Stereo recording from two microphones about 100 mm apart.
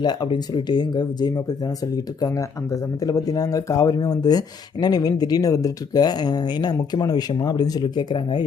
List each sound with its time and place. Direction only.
0.0 s speech: 50° left (ahead or behind)